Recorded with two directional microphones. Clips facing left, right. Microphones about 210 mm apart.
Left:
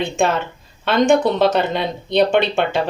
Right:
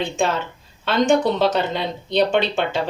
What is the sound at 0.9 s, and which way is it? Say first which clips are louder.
Speech: left 3 dB; 55° left (ahead or behind).